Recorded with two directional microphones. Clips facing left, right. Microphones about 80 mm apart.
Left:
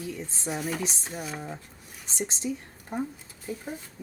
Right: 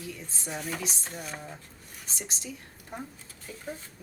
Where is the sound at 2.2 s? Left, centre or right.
Left.